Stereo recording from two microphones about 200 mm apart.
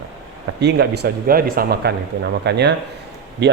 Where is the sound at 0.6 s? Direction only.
55° right (ahead or behind).